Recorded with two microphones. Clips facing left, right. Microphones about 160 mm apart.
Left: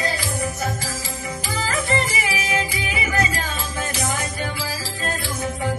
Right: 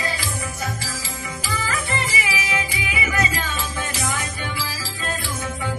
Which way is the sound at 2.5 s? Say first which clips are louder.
Left 2 dB; 35° left (ahead or behind).